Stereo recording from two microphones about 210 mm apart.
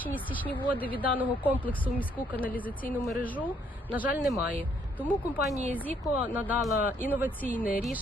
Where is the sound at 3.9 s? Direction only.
5° right (ahead or behind).